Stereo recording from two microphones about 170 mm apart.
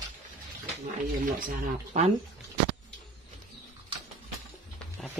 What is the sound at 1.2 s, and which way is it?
Speech, 55° right (ahead or behind).